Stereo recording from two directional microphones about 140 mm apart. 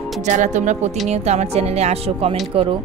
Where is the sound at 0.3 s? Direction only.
60° right (ahead or behind).